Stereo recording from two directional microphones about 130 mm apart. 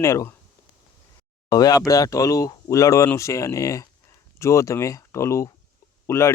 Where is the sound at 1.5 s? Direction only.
30° left (ahead or behind).